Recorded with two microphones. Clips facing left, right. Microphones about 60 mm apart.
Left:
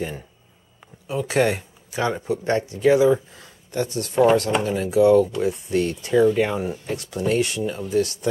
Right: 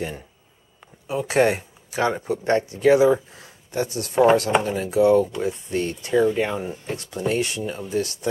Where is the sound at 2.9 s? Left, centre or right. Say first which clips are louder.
Right 1 dB; centre.